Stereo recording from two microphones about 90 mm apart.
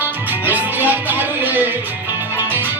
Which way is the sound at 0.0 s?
20° right (ahead or behind).